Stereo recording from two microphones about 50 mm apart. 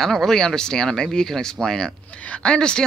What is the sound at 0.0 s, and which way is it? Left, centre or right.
Speech, centre.